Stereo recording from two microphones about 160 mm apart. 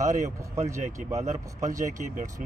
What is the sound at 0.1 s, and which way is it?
Speech, 50° right (ahead or behind).